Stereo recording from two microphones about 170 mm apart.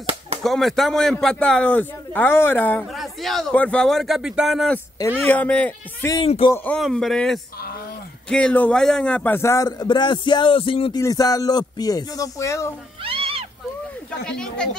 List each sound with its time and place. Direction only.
0.4 s a man's voice: centre (ahead or behind)
2.9 s a man's voice: centre (ahead or behind)
6.2 s speech: 35° left (ahead or behind)
6.5 s a man's voice: 10° left (ahead or behind); by 11.0 s 30° left (ahead or behind)
11.0 s a man's voice: 20° left (ahead or behind)
13.0 s cat: 35° right (ahead or behind)
14.2 s a man's voice: 5° left (ahead or behind)